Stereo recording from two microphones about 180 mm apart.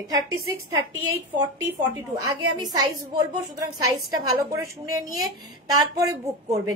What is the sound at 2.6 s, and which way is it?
A woman's voice, 20° right (ahead or behind).